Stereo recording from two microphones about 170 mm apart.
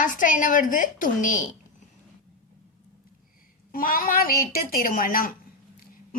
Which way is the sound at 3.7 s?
55° left (ahead or behind).